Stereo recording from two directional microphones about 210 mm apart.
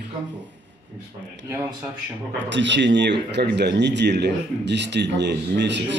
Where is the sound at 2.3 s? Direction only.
60° right (ahead or behind).